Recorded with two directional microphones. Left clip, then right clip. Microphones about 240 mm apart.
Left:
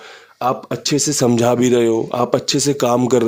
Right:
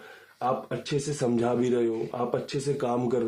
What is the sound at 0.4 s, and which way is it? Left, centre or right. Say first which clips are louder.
Speech: left 9 dB; left.